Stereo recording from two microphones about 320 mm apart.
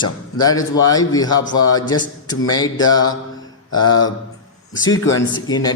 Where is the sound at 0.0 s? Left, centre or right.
Centre.